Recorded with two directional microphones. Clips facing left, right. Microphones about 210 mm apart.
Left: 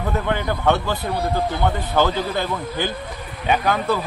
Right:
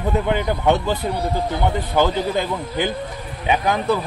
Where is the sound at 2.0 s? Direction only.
15° right (ahead or behind).